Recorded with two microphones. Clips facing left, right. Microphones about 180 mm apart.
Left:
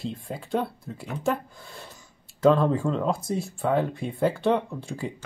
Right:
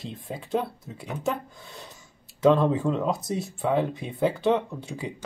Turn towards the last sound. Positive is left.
turn(degrees=0)  # may be behind; listen again after turning